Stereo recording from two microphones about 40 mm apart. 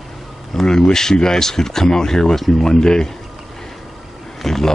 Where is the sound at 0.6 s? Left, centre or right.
Centre.